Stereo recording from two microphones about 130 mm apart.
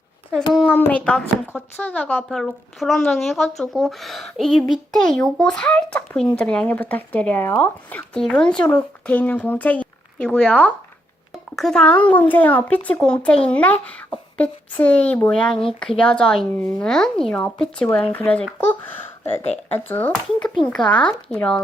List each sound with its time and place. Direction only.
0.7 s speech: 15° left (ahead or behind)